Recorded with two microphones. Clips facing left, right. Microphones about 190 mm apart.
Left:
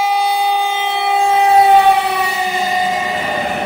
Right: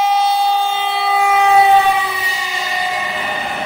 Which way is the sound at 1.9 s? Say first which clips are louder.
Left 5 dB; 70° left (ahead or behind).